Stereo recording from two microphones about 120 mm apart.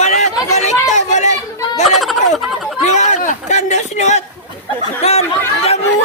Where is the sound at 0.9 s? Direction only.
80° left.